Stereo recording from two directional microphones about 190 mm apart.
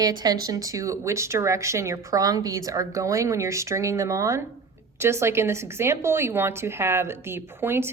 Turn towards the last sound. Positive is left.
turn(degrees=-10)  # may be behind; listen again after turning